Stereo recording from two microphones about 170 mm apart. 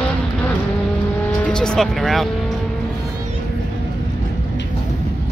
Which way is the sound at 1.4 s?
5° left (ahead or behind).